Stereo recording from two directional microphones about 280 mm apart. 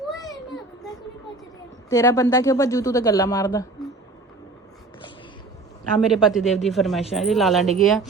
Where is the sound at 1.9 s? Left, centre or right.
Centre.